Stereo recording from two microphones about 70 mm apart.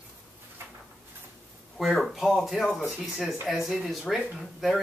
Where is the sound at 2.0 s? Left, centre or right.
Centre.